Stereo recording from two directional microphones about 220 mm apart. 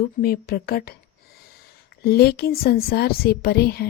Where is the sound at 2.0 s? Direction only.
45° left (ahead or behind).